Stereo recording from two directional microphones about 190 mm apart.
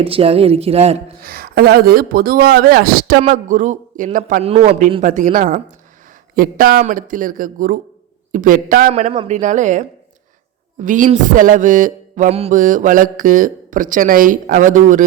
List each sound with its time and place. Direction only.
0.0 s speech: 30° right (ahead or behind)
1.2 s mantra: 50° right (ahead or behind)
4.4 s speech: 30° right (ahead or behind)
5.0 s mantra: 40° right (ahead or behind)
8.9 s speech: 35° right (ahead or behind)
10.8 s mantra: 45° right (ahead or behind)